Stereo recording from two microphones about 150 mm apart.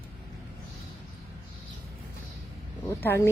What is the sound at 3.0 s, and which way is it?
Speech, 15° left (ahead or behind).